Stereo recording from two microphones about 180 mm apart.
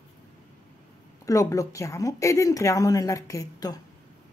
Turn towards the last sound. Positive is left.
turn(degrees=20)  # may be behind; listen again after turning